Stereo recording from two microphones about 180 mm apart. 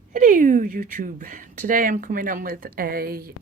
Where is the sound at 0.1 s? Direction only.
50° right (ahead or behind).